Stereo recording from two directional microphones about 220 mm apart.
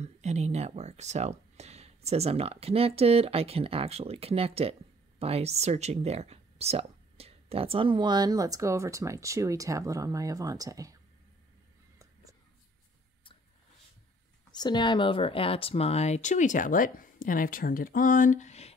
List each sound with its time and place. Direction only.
0.0 s speech: 30° right (ahead or behind)
14.5 s speech: 20° left (ahead or behind)